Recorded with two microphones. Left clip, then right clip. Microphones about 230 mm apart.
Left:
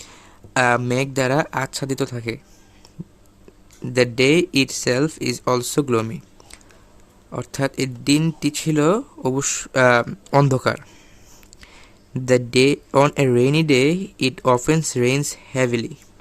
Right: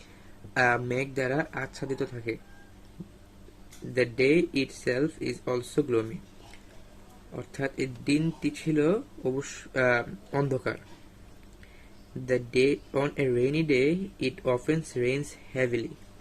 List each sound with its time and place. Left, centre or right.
0.5 s speech: left
3.9 s speech: left
7.3 s speech: left
12.2 s speech: left